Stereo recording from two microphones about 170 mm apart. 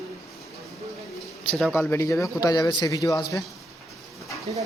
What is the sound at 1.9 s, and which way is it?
A man's voice, 15° left (ahead or behind).